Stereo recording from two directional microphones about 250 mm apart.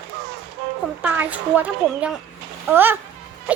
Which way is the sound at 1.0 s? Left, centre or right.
Centre.